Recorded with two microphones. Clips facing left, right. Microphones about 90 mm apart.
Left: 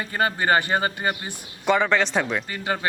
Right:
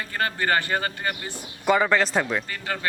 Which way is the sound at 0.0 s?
20° left (ahead or behind).